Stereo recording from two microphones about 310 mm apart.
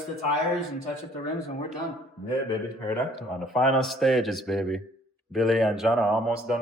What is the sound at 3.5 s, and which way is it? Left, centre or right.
Speech, centre.